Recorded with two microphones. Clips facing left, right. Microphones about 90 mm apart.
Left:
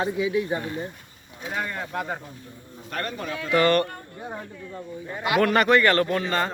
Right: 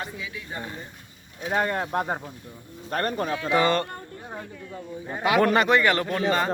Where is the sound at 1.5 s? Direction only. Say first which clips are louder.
Right 5 dB; 45° right (ahead or behind).